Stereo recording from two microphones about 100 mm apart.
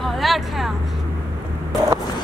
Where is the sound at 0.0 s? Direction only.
Centre (ahead or behind).